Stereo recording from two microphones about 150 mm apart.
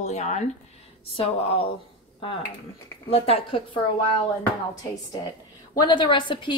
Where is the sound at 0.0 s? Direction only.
50° left (ahead or behind).